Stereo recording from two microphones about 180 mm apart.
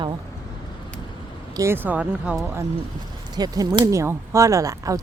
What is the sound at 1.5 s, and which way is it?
Speech, 15° right (ahead or behind).